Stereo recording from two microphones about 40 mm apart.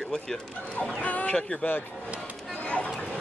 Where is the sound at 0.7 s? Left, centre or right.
Left.